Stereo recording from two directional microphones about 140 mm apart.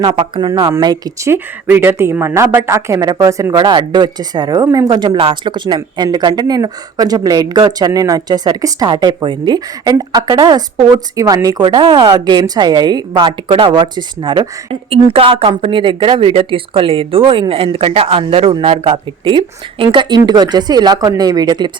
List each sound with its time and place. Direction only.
0.0 s a woman's voice: 35° right (ahead or behind)